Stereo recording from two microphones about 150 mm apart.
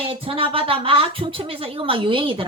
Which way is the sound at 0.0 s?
35° right (ahead or behind).